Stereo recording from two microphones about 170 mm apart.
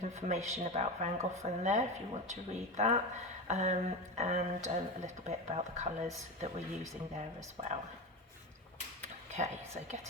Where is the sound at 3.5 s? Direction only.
40° right (ahead or behind).